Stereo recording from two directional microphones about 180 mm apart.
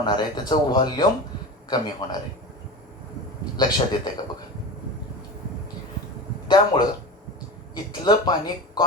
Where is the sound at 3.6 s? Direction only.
25° left (ahead or behind).